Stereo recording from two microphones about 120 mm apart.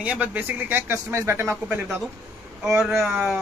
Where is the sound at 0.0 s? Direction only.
10° right (ahead or behind).